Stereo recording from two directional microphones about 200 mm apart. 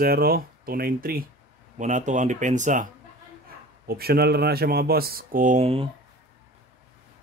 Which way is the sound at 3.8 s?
50° right (ahead or behind).